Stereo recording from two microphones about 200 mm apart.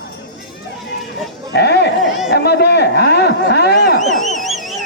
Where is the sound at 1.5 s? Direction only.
55° left (ahead or behind).